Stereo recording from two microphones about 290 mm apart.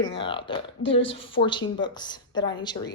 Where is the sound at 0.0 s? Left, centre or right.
Centre.